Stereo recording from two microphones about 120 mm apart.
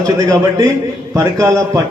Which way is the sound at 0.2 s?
30° right (ahead or behind).